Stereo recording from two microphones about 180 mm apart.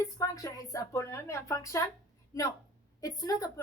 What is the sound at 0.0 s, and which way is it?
Speech, 15° left (ahead or behind).